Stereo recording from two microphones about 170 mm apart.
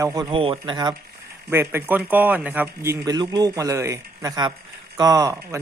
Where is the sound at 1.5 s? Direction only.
15° right (ahead or behind).